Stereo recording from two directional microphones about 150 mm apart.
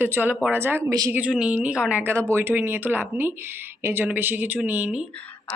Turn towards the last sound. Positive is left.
turn(degrees=-10)  # may be behind; listen again after turning